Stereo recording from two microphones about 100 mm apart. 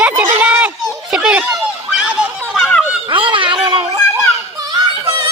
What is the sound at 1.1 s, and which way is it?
Children playing, 10° right (ahead or behind).